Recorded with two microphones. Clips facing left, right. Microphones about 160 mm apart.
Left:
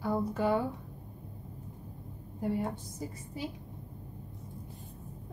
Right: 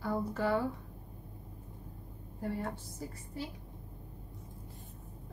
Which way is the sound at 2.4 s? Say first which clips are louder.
Left 4 dB; 15° left (ahead or behind).